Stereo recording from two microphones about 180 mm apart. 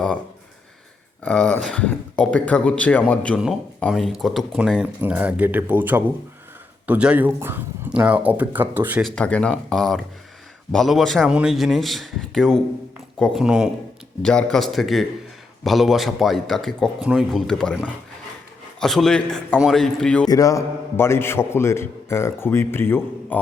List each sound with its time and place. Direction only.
1.2 s a man's voice: 5° left (ahead or behind); by 9.0 s 10° right (ahead or behind)
9.0 s speech: 5° left (ahead or behind)
20.2 s a man's voice: 20° left (ahead or behind)